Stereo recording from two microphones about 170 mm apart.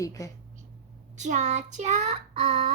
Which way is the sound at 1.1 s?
45° right (ahead or behind).